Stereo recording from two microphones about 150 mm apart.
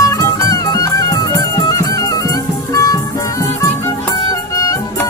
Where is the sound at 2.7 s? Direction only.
20° left (ahead or behind).